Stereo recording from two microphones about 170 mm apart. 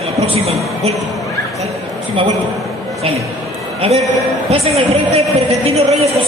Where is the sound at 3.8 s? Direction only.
35° right (ahead or behind).